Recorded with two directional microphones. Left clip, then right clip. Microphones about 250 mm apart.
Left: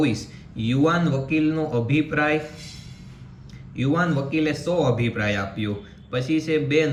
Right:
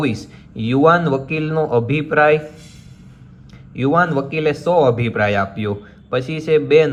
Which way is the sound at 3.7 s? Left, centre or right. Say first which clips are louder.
Right 8 dB; centre.